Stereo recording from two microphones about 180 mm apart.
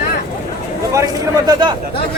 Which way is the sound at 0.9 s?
20° right (ahead or behind).